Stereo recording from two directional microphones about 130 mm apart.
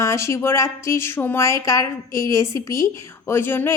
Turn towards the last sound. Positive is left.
turn(degrees=15)  # may be behind; listen again after turning